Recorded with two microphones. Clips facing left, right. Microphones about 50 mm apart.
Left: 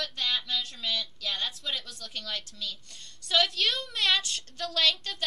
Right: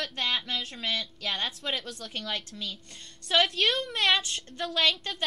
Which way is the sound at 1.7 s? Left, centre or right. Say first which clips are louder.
Right 3 dB; right.